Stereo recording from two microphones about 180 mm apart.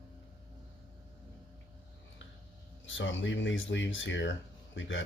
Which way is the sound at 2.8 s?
90° left.